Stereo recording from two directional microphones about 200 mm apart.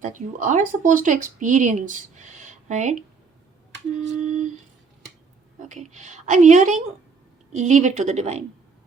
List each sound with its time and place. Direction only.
0.0 s speech: 40° right (ahead or behind)
4.0 s speech: 35° right (ahead or behind)
5.5 s speech: 35° right (ahead or behind)